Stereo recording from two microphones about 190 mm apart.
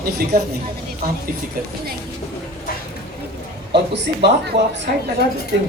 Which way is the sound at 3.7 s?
65° right (ahead or behind).